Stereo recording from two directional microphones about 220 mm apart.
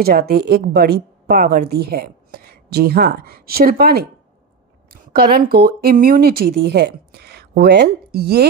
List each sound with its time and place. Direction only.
0.0 s a woman's voice: 45° right (ahead or behind)
5.1 s a woman's voice: 45° right (ahead or behind)